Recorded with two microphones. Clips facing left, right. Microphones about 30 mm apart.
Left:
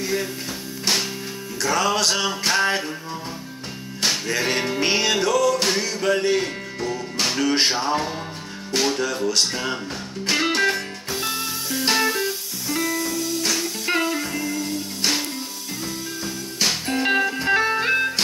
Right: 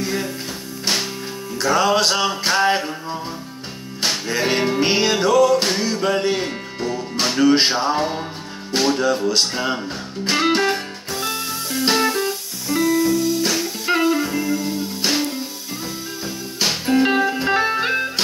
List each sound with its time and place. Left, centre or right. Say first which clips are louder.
0.0 s music: right 1 dB; centre
1.6 s music: right 4 dB; centre
4.1 s music: right 3 dB; centre